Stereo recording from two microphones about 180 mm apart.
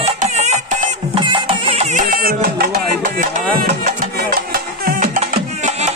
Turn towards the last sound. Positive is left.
turn(degrees=-40)  # may be behind; listen again after turning